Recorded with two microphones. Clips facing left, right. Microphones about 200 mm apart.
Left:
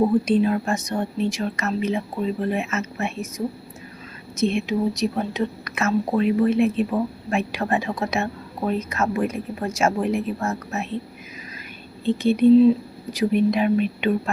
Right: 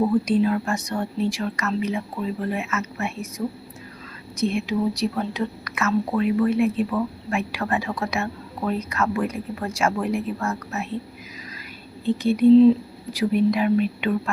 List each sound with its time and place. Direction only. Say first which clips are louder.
0.0 s speech: left 1 dB; 25° left (ahead or behind)
12.0 s speech: even; 25° left (ahead or behind)